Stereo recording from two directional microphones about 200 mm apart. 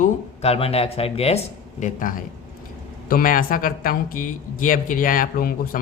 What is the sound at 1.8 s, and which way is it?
Speech, 40° left (ahead or behind).